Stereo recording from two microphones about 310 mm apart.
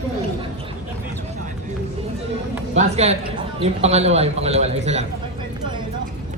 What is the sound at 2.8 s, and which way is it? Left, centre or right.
A man's voice, right.